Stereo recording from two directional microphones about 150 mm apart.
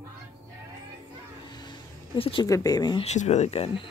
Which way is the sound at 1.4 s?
30° left (ahead or behind).